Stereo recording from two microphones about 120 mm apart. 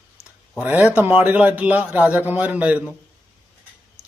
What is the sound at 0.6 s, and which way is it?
Speech, 15° right (ahead or behind).